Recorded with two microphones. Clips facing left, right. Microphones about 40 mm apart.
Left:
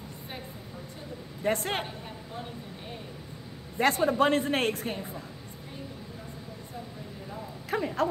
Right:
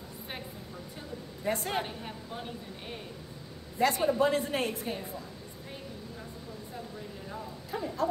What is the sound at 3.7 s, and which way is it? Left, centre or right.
A man's voice, left.